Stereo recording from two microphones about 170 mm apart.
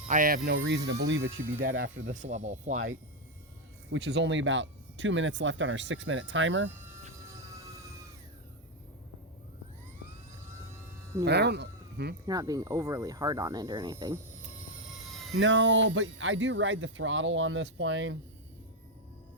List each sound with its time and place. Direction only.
0.1 s speech: 50° right (ahead or behind)
0.4 s speech: 90° right
1.2 s speech: 15° right (ahead or behind)
1.5 s speech: 90° right
2.1 s speech: 45° right (ahead or behind)
3.9 s speech: 90° right
11.3 s speech: 80° right
12.2 s speech: 20° right (ahead or behind)
15.4 s speech: 90° right